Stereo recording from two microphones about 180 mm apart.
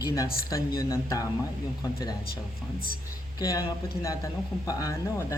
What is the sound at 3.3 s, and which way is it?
Speech, 20° left (ahead or behind).